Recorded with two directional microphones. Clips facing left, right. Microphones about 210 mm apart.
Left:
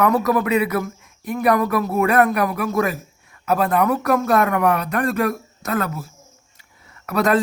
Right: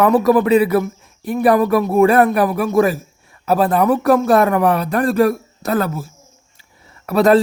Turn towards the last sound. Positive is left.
turn(degrees=-30)  # may be behind; listen again after turning